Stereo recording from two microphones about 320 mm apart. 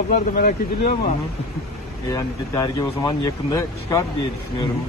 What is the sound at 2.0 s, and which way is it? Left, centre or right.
A man's voice, centre.